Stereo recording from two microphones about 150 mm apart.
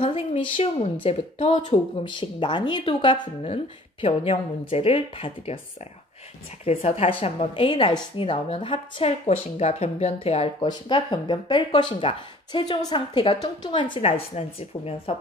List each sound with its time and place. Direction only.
0.0 s a woman's voice: 40° left (ahead or behind)
6.6 s speech: 40° left (ahead or behind)
10.7 s speech: 30° left (ahead or behind)